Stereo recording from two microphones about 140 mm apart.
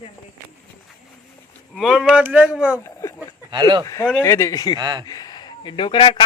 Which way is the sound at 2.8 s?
20° left (ahead or behind).